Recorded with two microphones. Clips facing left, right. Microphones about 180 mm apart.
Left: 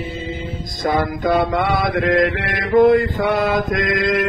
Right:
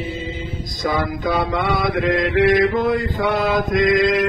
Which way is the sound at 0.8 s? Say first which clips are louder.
Left 3 dB; 55° left (ahead or behind).